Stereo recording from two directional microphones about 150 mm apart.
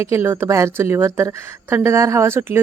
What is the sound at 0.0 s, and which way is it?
A woman's voice, 15° right (ahead or behind).